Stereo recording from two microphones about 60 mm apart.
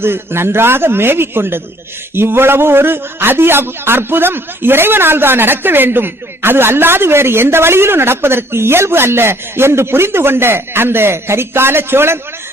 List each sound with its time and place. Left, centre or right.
0.0 s a man's voice: right